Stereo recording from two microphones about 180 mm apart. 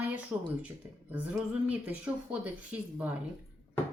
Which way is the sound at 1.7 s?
10° right (ahead or behind).